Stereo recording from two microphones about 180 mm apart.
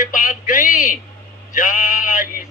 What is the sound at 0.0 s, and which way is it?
A man's voice, 50° left (ahead or behind).